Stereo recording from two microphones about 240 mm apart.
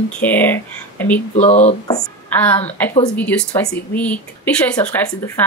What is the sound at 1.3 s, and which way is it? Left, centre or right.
Speech, left.